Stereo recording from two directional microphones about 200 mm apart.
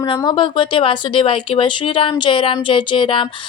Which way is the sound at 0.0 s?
20° left (ahead or behind).